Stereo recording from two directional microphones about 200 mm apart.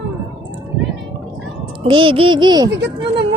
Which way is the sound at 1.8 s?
25° right (ahead or behind).